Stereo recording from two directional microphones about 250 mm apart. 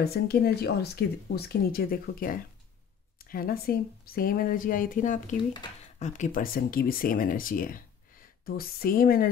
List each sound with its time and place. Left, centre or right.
0.0 s speech: left